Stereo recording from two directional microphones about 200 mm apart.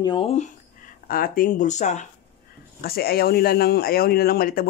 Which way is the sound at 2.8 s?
50° left (ahead or behind).